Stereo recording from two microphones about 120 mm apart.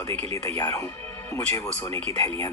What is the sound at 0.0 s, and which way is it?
Speech, 20° left (ahead or behind).